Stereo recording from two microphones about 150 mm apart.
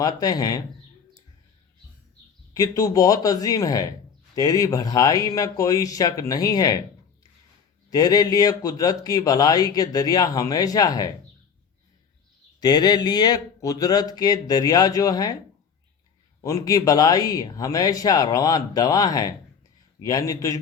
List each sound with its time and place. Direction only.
0.0 s a man's voice: 25° left (ahead or behind)
2.5 s a man's voice: 25° left (ahead or behind)
7.9 s a man's voice: 25° left (ahead or behind)
12.5 s a man's voice: 25° left (ahead or behind)
16.4 s a man's voice: 20° left (ahead or behind)